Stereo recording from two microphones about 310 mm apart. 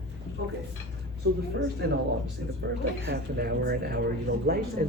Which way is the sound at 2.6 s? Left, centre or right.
Right.